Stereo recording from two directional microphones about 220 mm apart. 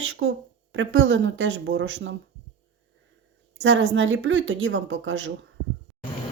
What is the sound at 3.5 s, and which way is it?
A woman's voice, 60° right (ahead or behind).